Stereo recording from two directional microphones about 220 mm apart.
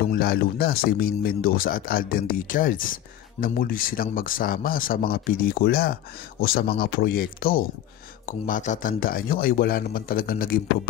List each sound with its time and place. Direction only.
0.1 s speech: 45° left (ahead or behind)